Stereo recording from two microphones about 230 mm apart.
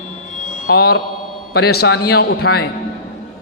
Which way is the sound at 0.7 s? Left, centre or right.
Left.